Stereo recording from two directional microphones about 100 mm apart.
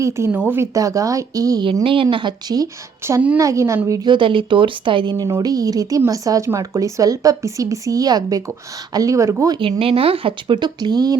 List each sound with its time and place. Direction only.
0.3 s speech: 15° right (ahead or behind); by 1.6 s 35° right (ahead or behind)
1.8 s speech: 60° right (ahead or behind)
3.2 s a woman's voice: 15° right (ahead or behind)
3.4 s speech: 30° right (ahead or behind)
4.1 s speech: 55° right (ahead or behind); by 9.6 s 30° right (ahead or behind)
9.6 s speech: 65° right (ahead or behind)
10.6 s speech: 45° right (ahead or behind)